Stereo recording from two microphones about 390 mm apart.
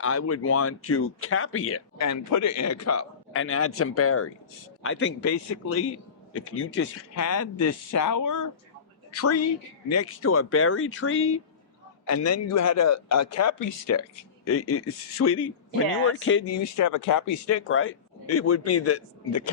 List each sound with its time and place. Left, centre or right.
0.0 s speech: left
16.7 s speech: left